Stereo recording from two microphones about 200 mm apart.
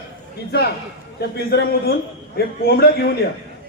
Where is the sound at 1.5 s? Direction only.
55° left (ahead or behind).